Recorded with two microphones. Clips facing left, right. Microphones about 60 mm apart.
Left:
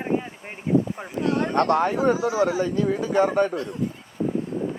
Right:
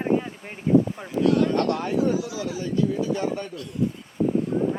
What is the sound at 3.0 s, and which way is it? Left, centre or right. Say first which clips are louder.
Speech: left 4 dB; left.